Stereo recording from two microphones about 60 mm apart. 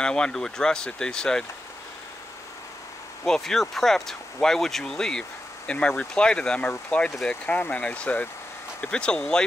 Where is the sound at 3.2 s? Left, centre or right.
Centre.